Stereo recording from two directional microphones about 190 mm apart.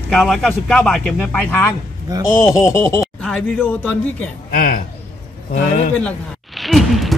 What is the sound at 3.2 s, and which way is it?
Speech, 5° left (ahead or behind).